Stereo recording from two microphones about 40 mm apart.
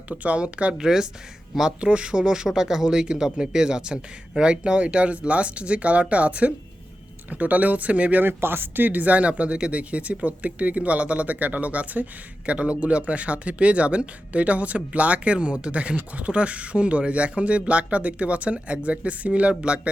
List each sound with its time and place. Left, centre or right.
0.2 s speech: right
0.8 s speech: centre; by 8.2 s right
8.2 s speech: right
8.9 s speech: right